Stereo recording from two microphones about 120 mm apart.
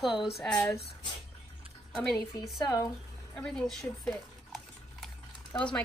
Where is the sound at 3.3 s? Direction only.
5° left (ahead or behind).